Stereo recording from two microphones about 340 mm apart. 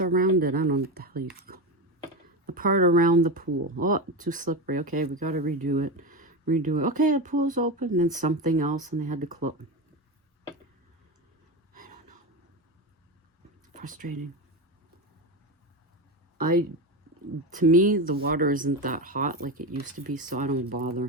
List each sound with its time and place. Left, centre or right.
0.0 s speech: right
11.7 s a sound: right
13.7 s speech: right
16.4 s speech: right